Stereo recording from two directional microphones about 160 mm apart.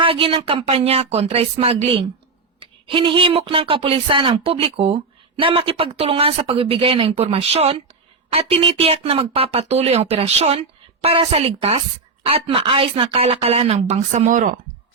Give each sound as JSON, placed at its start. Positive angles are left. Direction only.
{"t": 0.0, "sound": "speech", "side_deg": -35}